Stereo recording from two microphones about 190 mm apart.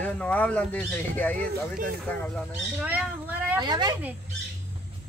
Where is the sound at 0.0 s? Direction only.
10° left (ahead or behind).